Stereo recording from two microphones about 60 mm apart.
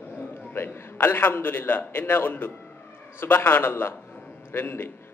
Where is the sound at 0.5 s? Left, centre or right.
Left.